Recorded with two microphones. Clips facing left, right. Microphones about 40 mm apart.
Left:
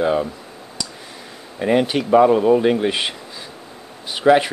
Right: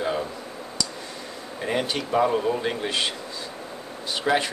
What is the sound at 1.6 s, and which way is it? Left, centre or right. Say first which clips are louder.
Speech: left 9 dB; centre.